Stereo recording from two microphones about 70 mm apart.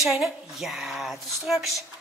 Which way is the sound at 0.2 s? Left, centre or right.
Centre.